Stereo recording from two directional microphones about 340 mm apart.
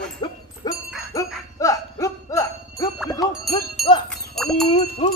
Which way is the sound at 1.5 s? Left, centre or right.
Centre.